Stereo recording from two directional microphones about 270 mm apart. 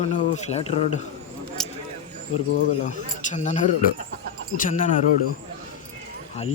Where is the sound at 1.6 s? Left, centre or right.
Centre.